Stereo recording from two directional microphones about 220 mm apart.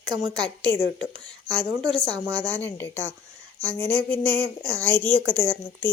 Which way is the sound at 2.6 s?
10° left (ahead or behind).